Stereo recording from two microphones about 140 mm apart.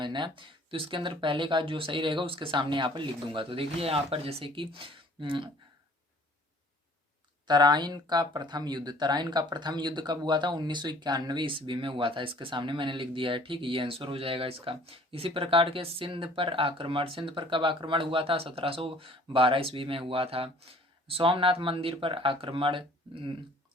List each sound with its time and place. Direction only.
0.0 s speech: 35° right (ahead or behind)
7.4 s speech: 30° right (ahead or behind)